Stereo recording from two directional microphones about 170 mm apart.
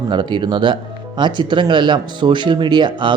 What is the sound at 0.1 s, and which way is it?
Speech, 25° right (ahead or behind).